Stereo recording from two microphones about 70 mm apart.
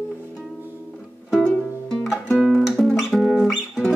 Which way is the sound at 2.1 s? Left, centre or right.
Centre.